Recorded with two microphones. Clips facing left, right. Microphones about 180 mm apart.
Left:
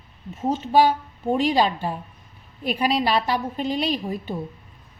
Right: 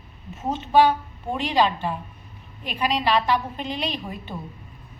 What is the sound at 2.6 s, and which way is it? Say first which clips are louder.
A woman's voice: left 3 dB; 40° left (ahead or behind).